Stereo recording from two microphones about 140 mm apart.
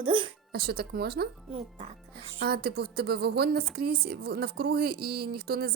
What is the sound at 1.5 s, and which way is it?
Speech, 50° right (ahead or behind).